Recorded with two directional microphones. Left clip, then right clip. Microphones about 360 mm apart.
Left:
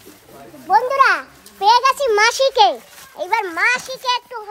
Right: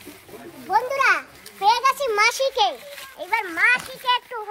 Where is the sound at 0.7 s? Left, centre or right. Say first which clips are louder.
Left 5 dB; centre.